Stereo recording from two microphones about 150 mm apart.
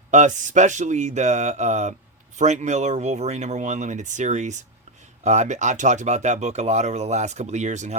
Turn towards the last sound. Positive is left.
turn(degrees=-50)  # may be behind; listen again after turning